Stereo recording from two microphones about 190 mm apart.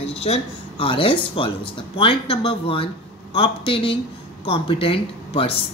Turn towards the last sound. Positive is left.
turn(degrees=30)  # may be behind; listen again after turning